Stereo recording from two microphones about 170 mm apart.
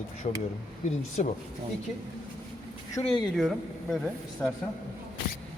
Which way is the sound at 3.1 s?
Centre (ahead or behind).